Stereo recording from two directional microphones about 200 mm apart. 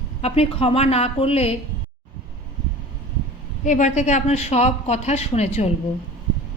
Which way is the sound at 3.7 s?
35° left (ahead or behind).